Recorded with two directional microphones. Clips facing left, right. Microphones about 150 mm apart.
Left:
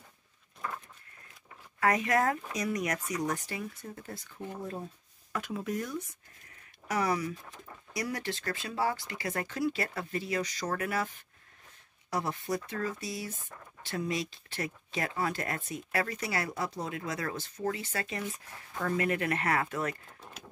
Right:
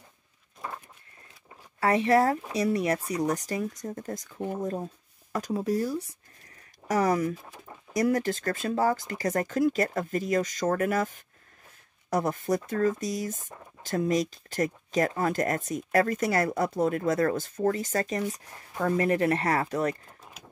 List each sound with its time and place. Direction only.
1.8 s speech: 30° right (ahead or behind)
6.9 s speech: 45° right (ahead or behind)
20.2 s a sound: 5° right (ahead or behind)